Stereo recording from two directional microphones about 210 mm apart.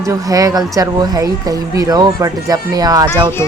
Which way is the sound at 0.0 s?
15° right (ahead or behind).